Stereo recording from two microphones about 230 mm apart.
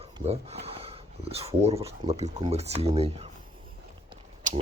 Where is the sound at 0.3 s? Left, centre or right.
Right.